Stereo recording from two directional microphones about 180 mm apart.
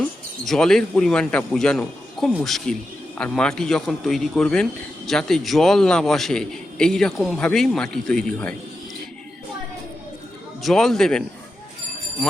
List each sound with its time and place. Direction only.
0.4 s speech: 5° left (ahead or behind)
10.6 s speech: centre (ahead or behind)